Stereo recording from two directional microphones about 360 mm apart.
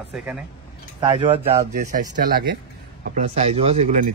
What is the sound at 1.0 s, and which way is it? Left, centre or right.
Speech, centre.